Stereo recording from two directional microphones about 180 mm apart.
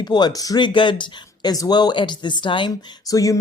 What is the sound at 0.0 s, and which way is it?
Speech, 25° left (ahead or behind).